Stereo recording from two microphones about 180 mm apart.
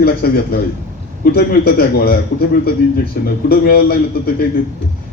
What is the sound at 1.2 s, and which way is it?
A man's voice, 60° left (ahead or behind).